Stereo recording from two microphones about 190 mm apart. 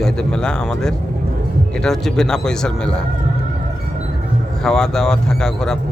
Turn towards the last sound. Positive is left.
turn(degrees=5)  # may be behind; listen again after turning